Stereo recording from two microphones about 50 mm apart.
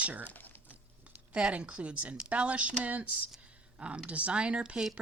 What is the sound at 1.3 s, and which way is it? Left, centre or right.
Speech, right.